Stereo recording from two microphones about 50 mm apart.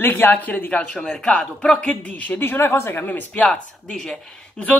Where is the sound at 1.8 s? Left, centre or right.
Left.